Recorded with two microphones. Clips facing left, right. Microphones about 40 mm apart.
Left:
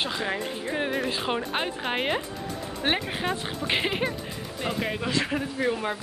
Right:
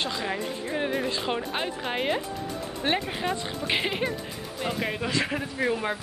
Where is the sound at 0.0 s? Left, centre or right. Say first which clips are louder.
Left 1 dB; centre.